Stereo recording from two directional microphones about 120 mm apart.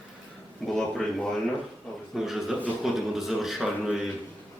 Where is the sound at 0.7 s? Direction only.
5° left (ahead or behind).